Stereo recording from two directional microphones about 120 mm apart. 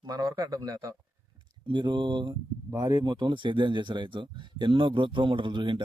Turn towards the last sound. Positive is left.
turn(degrees=-40)  # may be behind; listen again after turning